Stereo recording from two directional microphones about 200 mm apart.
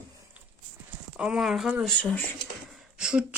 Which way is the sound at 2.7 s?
5° right (ahead or behind).